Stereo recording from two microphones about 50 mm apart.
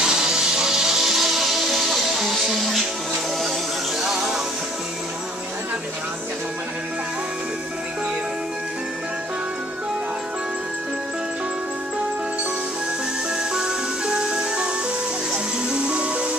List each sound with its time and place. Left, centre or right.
0.0 s music: centre
4.0 s music: centre
13.6 s music: centre